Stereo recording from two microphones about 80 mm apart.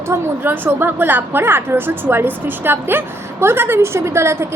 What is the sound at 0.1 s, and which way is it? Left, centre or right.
A woman's voice, right.